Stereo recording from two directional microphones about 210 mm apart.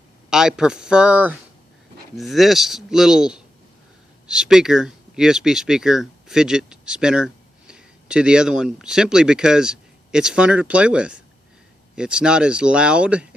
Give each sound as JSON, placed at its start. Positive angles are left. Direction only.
{"t": 0.3, "sound": "speech", "side_deg": -5}